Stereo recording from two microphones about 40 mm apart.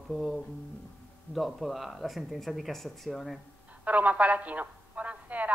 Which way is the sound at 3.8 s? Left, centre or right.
Right.